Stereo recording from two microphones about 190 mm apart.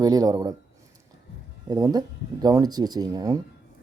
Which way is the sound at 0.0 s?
20° right (ahead or behind).